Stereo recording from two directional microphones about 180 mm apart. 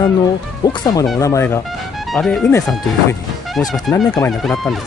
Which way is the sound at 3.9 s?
Centre (ahead or behind).